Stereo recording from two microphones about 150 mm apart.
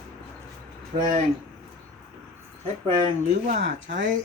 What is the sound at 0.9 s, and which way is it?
Speech, 45° right (ahead or behind).